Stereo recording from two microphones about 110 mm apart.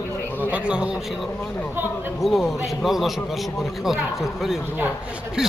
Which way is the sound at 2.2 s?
Centre (ahead or behind).